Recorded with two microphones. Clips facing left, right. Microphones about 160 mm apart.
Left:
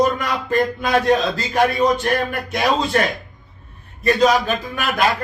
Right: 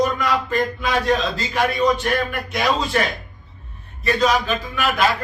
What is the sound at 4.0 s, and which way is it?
A man's voice, 45° left (ahead or behind).